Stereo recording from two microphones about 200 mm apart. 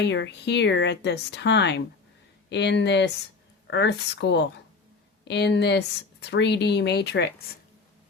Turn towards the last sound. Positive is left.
turn(degrees=55)  # may be behind; listen again after turning